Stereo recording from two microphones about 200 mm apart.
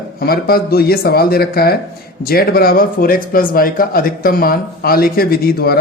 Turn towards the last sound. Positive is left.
turn(degrees=50)  # may be behind; listen again after turning